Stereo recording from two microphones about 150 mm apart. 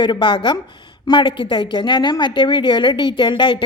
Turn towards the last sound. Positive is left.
turn(degrees=30)  # may be behind; listen again after turning